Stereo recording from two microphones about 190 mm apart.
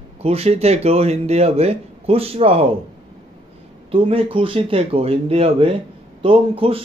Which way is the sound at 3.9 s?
30° right (ahead or behind).